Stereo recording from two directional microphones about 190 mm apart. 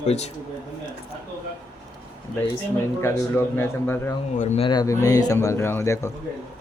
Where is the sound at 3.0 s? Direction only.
10° left (ahead or behind).